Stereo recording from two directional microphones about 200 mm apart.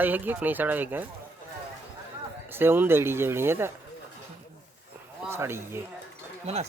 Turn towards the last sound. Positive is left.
turn(degrees=-35)  # may be behind; listen again after turning